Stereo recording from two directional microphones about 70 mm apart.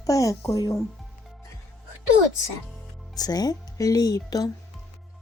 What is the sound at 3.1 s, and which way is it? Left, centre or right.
Speech, left.